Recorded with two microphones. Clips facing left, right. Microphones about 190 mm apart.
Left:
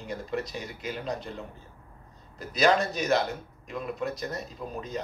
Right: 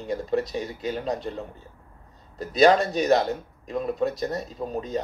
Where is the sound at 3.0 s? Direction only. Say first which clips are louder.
Right 5 dB; 40° right (ahead or behind).